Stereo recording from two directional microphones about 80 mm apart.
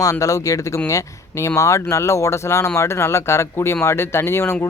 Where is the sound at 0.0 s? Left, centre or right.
Left.